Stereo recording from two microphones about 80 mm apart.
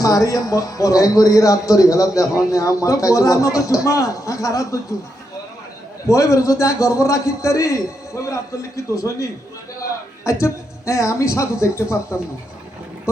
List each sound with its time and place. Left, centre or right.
0.0 s a man's voice: left
6.1 s a man's voice: left
10.4 s a woman's voice: left